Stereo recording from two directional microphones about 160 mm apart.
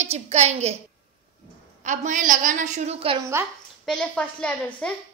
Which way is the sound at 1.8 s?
50° right (ahead or behind).